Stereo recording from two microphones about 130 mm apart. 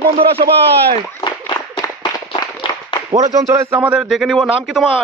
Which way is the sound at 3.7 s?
10° right (ahead or behind).